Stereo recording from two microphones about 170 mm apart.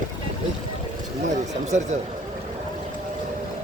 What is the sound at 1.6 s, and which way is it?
Speech, 45° right (ahead or behind).